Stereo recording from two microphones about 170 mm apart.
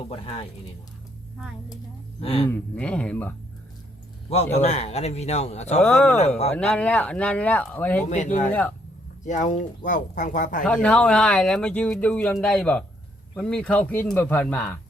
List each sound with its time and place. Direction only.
0.1 s speech: 35° left (ahead or behind)
2.2 s speech: 35° left (ahead or behind)
2.5 s speech: 5° left (ahead or behind)
4.5 s speech: 40° left (ahead or behind)
5.8 s speech: 10° left (ahead or behind)
6.1 s speech: 40° left (ahead or behind)
6.5 s speech: 10° left (ahead or behind)
8.1 s speech: 45° left (ahead or behind)
8.4 s speech: 10° left (ahead or behind)
9.2 s speech: 45° left (ahead or behind)
10.7 s speech: 5° left (ahead or behind)